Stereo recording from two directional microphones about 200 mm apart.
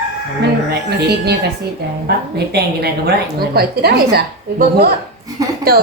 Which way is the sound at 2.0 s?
55° right (ahead or behind).